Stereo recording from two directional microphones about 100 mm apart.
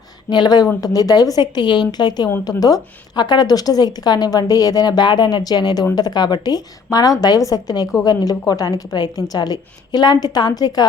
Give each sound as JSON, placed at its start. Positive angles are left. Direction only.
{"t": 0.3, "sound": "a woman's voice", "side_deg": 45}